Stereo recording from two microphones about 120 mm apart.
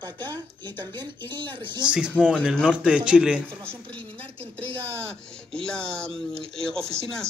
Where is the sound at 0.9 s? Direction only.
40° right (ahead or behind).